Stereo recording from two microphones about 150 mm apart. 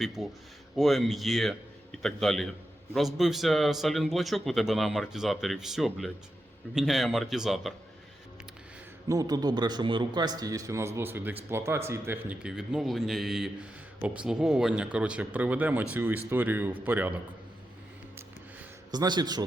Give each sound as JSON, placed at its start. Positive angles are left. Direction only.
{"t": 0.0, "sound": "a man's voice", "side_deg": 0}
{"t": 9.0, "sound": "a man's voice", "side_deg": -25}
{"t": 18.9, "sound": "a man's voice", "side_deg": -30}